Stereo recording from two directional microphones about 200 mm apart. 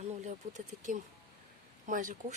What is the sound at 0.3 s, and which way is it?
Speech, 40° right (ahead or behind).